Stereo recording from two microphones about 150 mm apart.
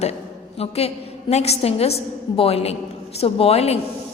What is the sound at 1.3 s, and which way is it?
A woman's voice, 45° left (ahead or behind).